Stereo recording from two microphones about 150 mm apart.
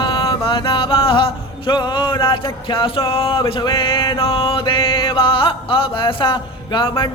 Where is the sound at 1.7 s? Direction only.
30° left (ahead or behind).